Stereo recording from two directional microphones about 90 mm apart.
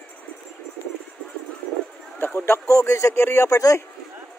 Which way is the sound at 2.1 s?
25° left (ahead or behind).